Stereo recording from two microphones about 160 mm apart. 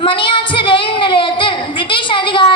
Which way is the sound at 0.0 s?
30° left (ahead or behind).